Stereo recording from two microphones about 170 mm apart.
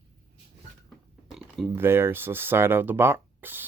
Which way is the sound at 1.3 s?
Centre (ahead or behind).